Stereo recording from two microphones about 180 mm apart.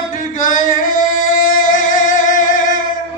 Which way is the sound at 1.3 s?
50° left (ahead or behind).